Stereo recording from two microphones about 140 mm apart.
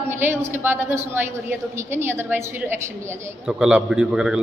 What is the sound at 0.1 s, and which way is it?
A woman's voice, 15° right (ahead or behind).